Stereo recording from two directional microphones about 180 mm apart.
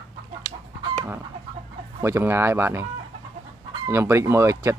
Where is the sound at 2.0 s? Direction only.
15° right (ahead or behind).